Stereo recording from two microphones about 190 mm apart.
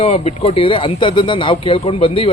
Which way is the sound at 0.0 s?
35° left (ahead or behind).